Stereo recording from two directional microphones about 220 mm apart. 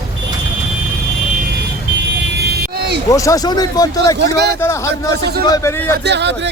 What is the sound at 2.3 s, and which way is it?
Vehicle, 45° right (ahead or behind).